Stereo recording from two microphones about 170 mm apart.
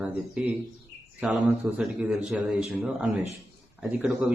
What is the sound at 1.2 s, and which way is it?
A man's voice, 5° right (ahead or behind).